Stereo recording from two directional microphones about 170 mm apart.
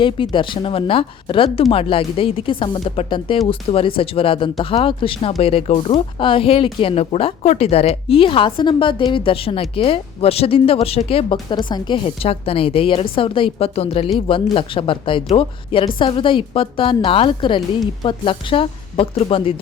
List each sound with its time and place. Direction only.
0.0 s speech: 30° left (ahead or behind)